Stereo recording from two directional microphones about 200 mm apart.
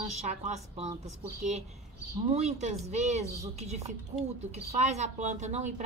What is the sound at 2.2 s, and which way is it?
A woman's voice, 35° right (ahead or behind).